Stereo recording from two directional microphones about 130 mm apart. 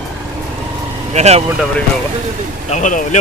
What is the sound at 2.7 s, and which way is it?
Speech, 70° left (ahead or behind).